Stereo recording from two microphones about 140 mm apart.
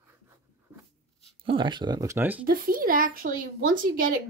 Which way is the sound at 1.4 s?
35° right (ahead or behind).